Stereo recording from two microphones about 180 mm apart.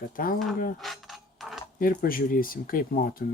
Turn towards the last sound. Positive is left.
turn(degrees=55)  # may be behind; listen again after turning